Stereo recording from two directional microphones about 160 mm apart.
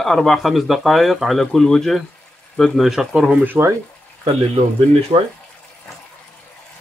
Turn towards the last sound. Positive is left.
turn(degrees=-45)  # may be behind; listen again after turning